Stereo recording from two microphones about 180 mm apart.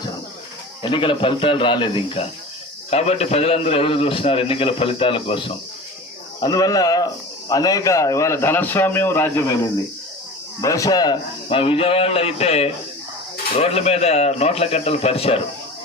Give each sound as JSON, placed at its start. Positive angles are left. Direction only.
{"t": 0.8, "sound": "a man's voice", "side_deg": 25}
{"t": 10.6, "sound": "a man's voice", "side_deg": 20}